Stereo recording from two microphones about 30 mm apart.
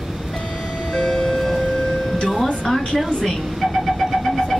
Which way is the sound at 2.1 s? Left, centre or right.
Centre.